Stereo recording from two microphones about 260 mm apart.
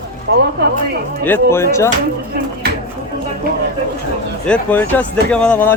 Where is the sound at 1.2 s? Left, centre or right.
Centre.